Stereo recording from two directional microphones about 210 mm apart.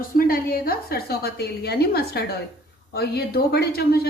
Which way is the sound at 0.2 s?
45° left (ahead or behind).